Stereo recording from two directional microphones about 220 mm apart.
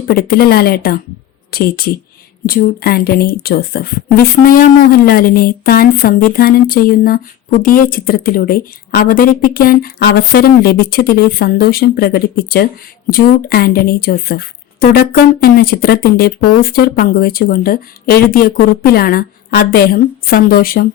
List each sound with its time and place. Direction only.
0.1 s speech: 45° left (ahead or behind)